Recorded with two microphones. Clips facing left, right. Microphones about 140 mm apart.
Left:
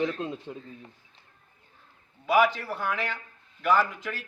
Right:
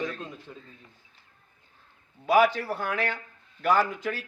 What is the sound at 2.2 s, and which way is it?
Speech, 35° right (ahead or behind).